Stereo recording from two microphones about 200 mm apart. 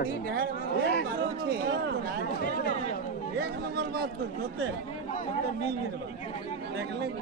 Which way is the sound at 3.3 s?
55° right (ahead or behind).